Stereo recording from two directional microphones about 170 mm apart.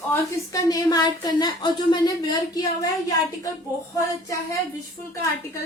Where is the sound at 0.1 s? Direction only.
20° left (ahead or behind).